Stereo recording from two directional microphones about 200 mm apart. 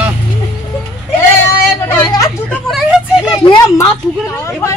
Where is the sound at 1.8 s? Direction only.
10° left (ahead or behind).